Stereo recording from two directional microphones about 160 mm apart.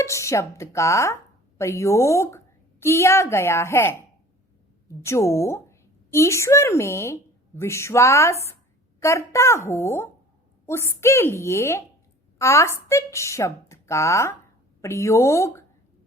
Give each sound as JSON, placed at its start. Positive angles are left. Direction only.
{"t": 0.0, "sound": "a woman's voice", "side_deg": 20}